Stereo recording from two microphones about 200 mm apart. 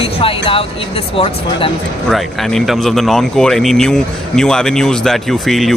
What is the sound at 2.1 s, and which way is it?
Speech, centre (ahead or behind).